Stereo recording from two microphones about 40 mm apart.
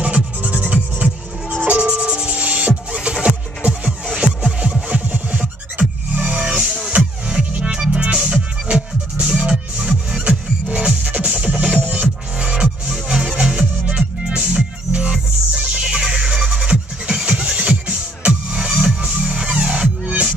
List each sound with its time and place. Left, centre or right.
0.0 s music: right
4.8 s music: right
18.7 s music: centre
18.9 s music: right